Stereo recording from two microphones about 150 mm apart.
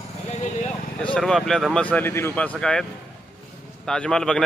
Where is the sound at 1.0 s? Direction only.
5° left (ahead or behind).